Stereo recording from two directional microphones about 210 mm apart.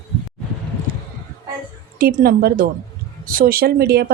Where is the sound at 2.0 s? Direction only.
45° right (ahead or behind).